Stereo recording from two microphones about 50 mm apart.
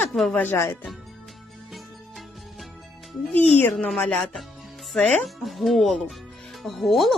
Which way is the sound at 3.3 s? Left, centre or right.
Left.